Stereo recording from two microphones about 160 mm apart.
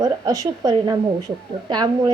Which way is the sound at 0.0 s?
20° right (ahead or behind).